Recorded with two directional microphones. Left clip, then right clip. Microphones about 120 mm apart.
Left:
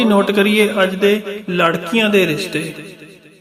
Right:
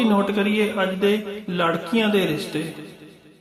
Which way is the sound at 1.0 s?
25° left (ahead or behind).